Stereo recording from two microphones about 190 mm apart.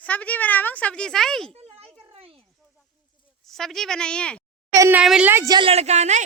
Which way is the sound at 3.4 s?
Centre (ahead or behind).